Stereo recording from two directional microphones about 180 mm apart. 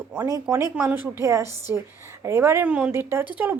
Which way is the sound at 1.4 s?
20° left (ahead or behind).